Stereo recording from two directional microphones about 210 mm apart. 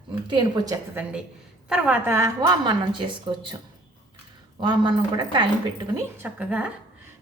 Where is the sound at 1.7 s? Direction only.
10° right (ahead or behind).